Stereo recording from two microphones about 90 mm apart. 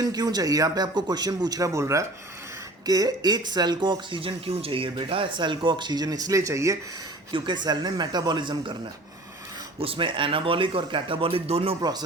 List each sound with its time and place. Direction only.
0.0 s speech: 45° right (ahead or behind)
7.3 s speech: 60° right (ahead or behind); by 8.3 s 40° right (ahead or behind)
8.3 s speech: 60° right (ahead or behind)
9.8 s speech: 80° right
11.8 s speech: 50° right (ahead or behind)